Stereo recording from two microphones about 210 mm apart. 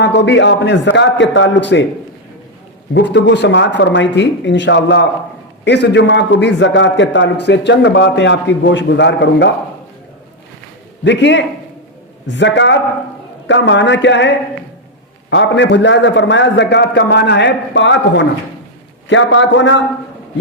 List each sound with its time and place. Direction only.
0.0 s a man's voice: 55° left (ahead or behind)
2.9 s a man's voice: 55° left (ahead or behind)
11.0 s a man's voice: 60° left (ahead or behind)